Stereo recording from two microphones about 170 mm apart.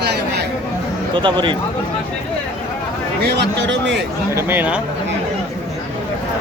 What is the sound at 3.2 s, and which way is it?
Speech, 85° right.